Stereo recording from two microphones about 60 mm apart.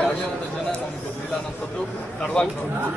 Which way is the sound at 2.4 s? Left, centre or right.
Centre.